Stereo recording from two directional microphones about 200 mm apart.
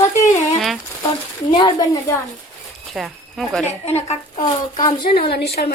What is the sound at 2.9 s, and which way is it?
Speech, centre (ahead or behind).